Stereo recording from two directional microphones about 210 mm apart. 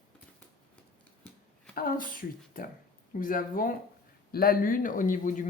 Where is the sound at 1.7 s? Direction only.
45° left (ahead or behind).